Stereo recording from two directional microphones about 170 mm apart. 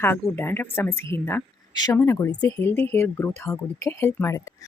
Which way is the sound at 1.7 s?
25° left (ahead or behind).